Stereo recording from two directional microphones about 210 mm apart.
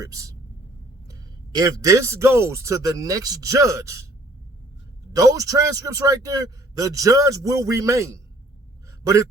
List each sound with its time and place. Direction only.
0.0 s a man's voice: 15° right (ahead or behind)
1.5 s a man's voice: 15° right (ahead or behind)
5.1 s a man's voice: 15° right (ahead or behind)